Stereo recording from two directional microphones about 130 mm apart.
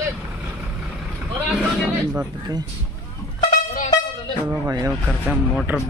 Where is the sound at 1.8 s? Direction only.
5° right (ahead or behind).